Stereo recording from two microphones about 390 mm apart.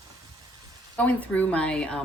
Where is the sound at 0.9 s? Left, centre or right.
Centre.